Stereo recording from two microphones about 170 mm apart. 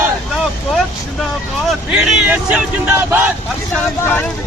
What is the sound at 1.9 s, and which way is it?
Speech, 5° right (ahead or behind).